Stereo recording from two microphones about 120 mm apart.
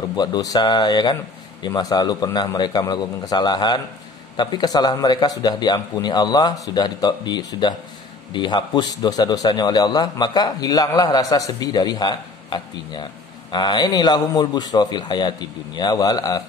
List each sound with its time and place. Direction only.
0.1 s a man's voice: 35° left (ahead or behind)